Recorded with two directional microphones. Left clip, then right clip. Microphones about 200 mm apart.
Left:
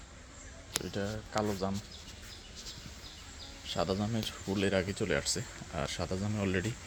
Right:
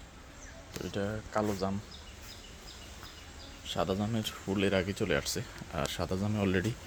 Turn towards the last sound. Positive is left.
turn(degrees=-15)  # may be behind; listen again after turning